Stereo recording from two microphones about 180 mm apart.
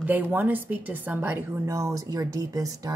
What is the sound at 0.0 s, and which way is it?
A woman's voice, 10° right (ahead or behind).